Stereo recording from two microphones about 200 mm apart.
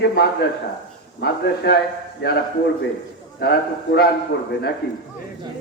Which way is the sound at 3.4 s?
55° left (ahead or behind).